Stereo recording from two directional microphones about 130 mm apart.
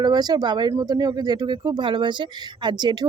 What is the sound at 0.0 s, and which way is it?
Speech, 30° right (ahead or behind).